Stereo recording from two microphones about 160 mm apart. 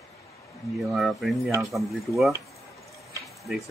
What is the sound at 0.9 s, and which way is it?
Speech, centre (ahead or behind).